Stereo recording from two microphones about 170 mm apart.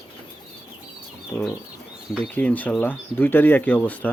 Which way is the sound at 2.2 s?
10° left (ahead or behind).